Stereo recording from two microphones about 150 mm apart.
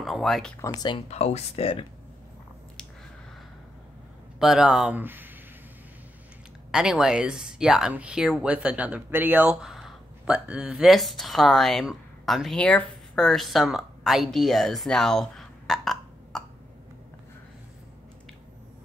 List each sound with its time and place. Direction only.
0.0 s speech: centre (ahead or behind)
0.7 s speech: 30° left (ahead or behind)
1.1 s speech: 45° left (ahead or behind)
4.4 s speech: 5° right (ahead or behind)
6.7 s speech: 5° right (ahead or behind)